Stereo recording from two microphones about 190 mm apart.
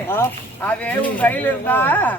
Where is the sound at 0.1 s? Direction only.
10° left (ahead or behind).